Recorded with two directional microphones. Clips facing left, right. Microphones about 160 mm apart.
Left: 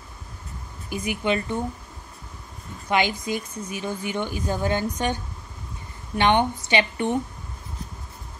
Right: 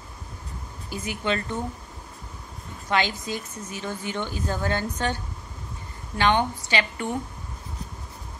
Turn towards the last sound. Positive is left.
turn(degrees=20)  # may be behind; listen again after turning